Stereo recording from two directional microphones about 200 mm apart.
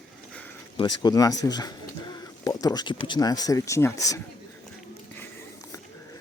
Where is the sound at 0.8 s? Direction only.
20° left (ahead or behind).